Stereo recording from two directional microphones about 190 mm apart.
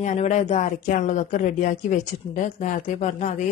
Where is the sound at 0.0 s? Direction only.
40° left (ahead or behind).